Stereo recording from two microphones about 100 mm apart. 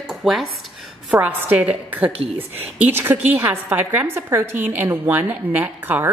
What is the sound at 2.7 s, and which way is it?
A woman's voice, 20° right (ahead or behind).